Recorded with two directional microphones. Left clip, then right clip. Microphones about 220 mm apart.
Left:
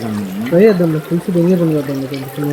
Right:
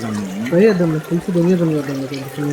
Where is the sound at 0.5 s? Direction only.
25° left (ahead or behind).